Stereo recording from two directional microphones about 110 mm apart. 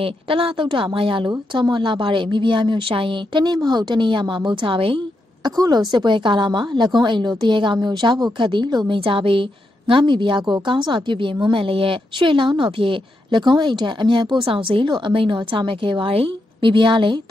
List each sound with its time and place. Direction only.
0.0 s speech: 55° right (ahead or behind)
5.4 s speech: 35° right (ahead or behind)